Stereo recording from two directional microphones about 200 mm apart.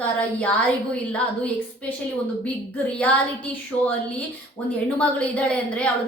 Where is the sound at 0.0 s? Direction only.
5° left (ahead or behind).